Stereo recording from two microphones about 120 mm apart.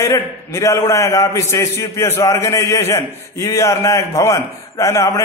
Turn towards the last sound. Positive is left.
turn(degrees=25)  # may be behind; listen again after turning